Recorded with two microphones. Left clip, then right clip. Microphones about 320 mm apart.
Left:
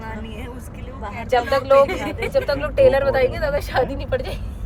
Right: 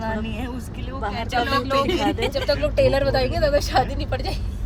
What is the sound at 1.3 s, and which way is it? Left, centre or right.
Speech, left.